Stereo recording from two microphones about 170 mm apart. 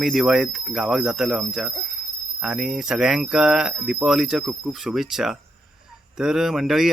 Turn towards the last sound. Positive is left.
turn(degrees=0)  # may be behind; listen again after turning